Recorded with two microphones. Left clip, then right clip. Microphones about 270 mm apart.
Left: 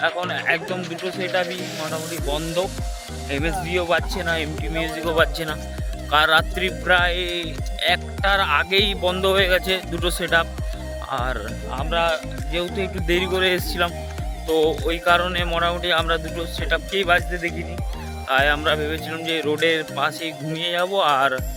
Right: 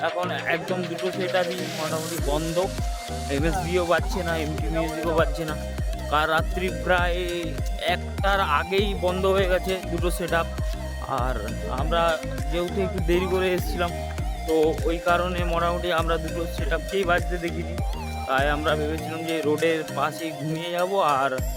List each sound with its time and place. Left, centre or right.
0.0 s speech: centre